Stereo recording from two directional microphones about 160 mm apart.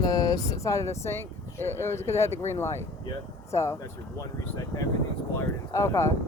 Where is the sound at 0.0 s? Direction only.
25° left (ahead or behind).